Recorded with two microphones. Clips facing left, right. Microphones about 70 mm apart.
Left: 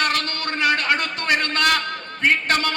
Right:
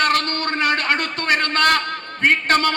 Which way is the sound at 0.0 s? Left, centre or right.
Right.